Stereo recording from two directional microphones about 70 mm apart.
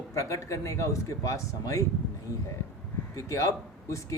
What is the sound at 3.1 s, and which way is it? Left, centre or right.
Speech, left.